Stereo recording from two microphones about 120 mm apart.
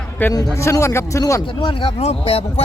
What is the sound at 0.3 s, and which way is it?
A man's voice, 25° left (ahead or behind).